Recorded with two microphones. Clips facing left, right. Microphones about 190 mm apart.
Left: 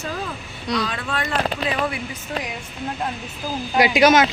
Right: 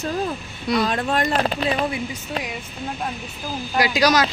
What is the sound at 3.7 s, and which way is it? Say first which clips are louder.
Speech: left 3 dB; 20° left (ahead or behind).